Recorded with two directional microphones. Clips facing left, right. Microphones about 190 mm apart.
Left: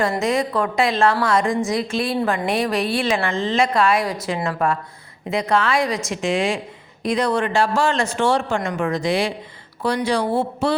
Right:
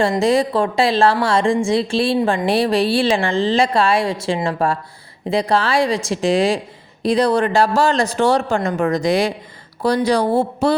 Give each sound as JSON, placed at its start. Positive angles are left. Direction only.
{"t": 0.0, "sound": "a woman's voice", "side_deg": -30}